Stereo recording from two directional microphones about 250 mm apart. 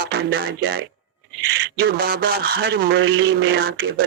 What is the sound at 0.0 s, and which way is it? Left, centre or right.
Speech, right.